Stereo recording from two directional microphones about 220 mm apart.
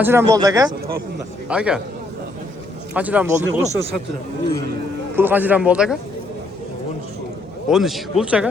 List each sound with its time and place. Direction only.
0.0 s speech: 10° right (ahead or behind)
1.5 s speech: 5° right (ahead or behind)
2.9 s speech: 5° right (ahead or behind)
5.1 s speech: 10° right (ahead or behind)
7.7 s speech: centre (ahead or behind)